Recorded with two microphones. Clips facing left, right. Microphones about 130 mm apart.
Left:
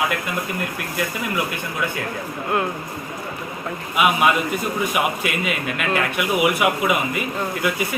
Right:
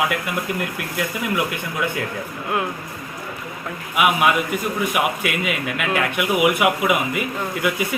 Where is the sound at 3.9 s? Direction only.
10° right (ahead or behind).